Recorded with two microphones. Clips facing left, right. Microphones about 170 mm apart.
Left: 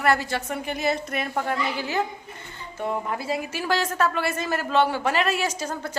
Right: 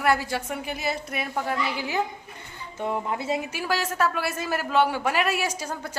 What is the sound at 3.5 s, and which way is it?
A man's voice, 5° right (ahead or behind).